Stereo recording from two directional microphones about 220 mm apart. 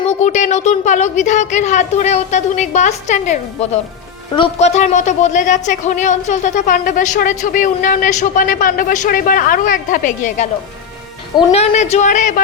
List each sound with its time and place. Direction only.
0.0 s speech: 30° left (ahead or behind)